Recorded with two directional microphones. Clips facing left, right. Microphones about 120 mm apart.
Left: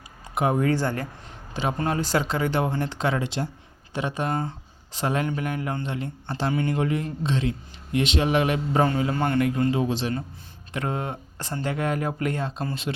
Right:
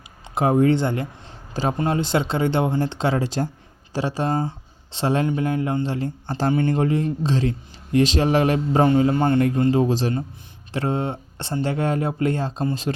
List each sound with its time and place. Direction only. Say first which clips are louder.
0.3 s a man's voice: right 5 dB; 30° right (ahead or behind)